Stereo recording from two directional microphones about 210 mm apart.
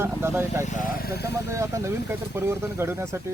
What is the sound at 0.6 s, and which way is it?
Speech, 35° left (ahead or behind).